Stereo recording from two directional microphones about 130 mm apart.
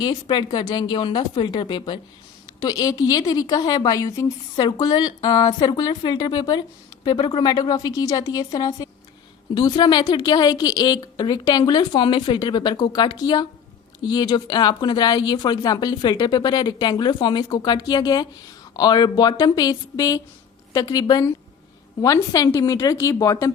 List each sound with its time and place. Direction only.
0.0 s a woman's voice: 35° left (ahead or behind)